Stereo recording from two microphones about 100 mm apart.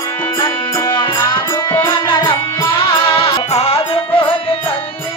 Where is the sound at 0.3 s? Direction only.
50° left (ahead or behind).